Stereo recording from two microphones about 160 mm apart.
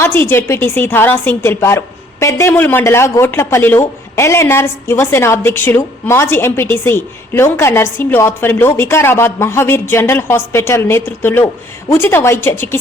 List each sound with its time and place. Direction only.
0.0 s a woman's voice: 15° left (ahead or behind)